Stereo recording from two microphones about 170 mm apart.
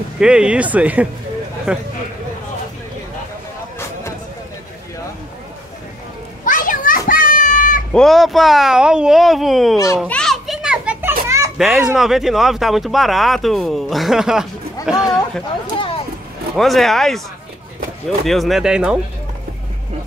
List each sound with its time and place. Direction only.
0.2 s speech: 5° right (ahead or behind)
6.4 s children playing: 50° left (ahead or behind)
7.9 s speech: centre (ahead or behind)
10.0 s children playing: 5° left (ahead or behind); by 11.5 s 15° right (ahead or behind)
11.5 s a child's voice: centre (ahead or behind)
16.5 s speech: centre (ahead or behind)